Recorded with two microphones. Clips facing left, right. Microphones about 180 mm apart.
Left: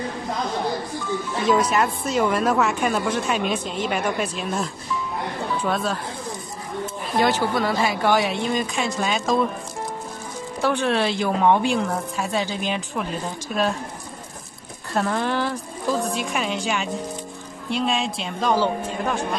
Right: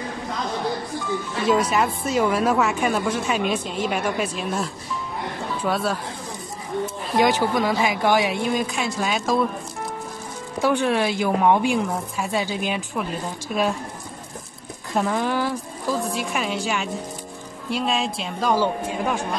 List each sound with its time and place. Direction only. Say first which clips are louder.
1.5 s a woman's voice: even; 5° right (ahead or behind)
7.2 s a woman's voice: right 1 dB; 15° right (ahead or behind)
10.6 s a woman's voice: right 1 dB; 10° right (ahead or behind)
14.9 s a woman's voice: right 1 dB; 10° right (ahead or behind)